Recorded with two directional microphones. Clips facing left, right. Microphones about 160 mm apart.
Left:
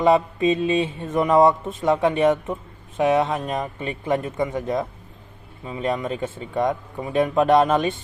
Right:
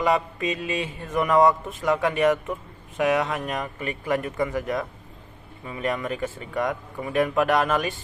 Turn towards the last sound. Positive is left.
turn(degrees=25)  # may be behind; listen again after turning